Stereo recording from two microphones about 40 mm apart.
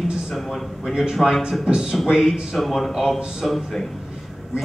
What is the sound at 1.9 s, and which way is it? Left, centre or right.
A man's voice, centre.